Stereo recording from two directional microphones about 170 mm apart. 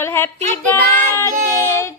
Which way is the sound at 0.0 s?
15° left (ahead or behind).